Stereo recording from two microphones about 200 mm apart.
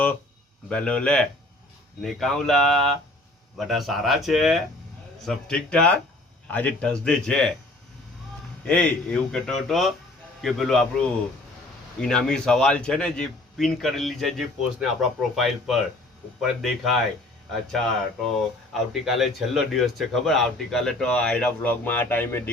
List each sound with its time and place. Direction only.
0.7 s speech: 5° left (ahead or behind)
8.6 s speech: 5° left (ahead or behind)